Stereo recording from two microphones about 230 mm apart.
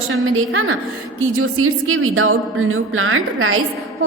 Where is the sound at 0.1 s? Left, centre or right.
Right.